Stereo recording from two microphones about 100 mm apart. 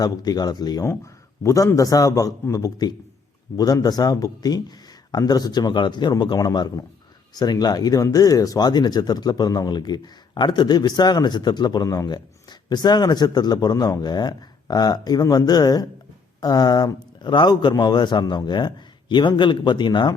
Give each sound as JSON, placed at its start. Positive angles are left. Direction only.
{"t": 0.0, "sound": "a man's voice", "side_deg": 40}
{"t": 0.9, "sound": "a man's voice", "side_deg": 30}